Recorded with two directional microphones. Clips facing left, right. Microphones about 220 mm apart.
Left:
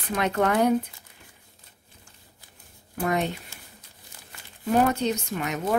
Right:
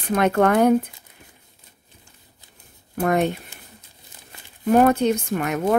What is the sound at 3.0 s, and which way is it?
Speech, 55° right (ahead or behind).